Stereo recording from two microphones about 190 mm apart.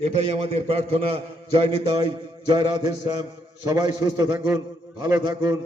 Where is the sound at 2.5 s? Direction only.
25° right (ahead or behind).